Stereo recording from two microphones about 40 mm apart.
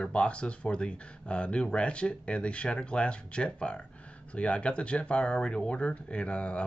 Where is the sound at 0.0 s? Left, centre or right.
Left.